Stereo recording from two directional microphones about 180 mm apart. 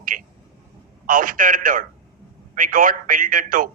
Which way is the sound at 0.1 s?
45° right (ahead or behind).